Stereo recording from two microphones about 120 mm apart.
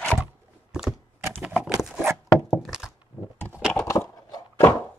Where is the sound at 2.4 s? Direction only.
5° right (ahead or behind).